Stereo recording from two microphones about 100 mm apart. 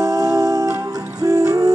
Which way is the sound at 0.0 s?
35° right (ahead or behind).